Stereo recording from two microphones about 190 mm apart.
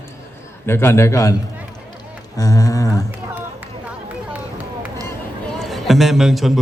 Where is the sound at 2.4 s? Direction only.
20° left (ahead or behind).